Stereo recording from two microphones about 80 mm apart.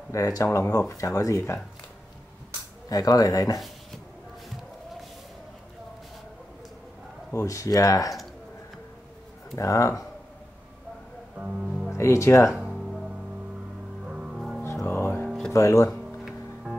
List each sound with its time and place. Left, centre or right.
0.1 s speech: left
2.9 s speech: left
7.3 s speech: left
9.6 s speech: left
11.3 s music: centre
12.0 s speech: left
12.4 s music: centre
14.6 s music: left
15.2 s music: centre
15.5 s speech: left
15.9 s music: centre